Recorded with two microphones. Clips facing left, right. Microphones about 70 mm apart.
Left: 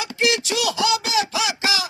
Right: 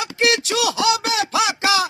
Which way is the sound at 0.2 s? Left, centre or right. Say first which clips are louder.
Right 2 dB; right.